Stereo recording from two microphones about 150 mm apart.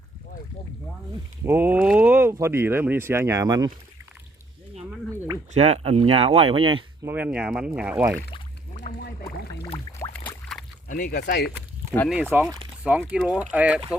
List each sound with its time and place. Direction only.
1.5 s speech: 15° right (ahead or behind)
5.5 s speech: 45° right (ahead or behind)
7.0 s speech: 10° right (ahead or behind)
9.0 s a sound: 90° left
10.1 s boat: 10° left (ahead or behind)
10.8 s speech: 70° left (ahead or behind); by 11.4 s 90° left
12.0 s speech: 10° right (ahead or behind)